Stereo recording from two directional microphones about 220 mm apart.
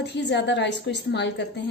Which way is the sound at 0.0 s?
50° left (ahead or behind).